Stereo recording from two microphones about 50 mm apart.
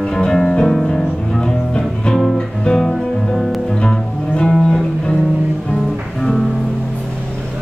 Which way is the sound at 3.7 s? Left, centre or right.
Centre.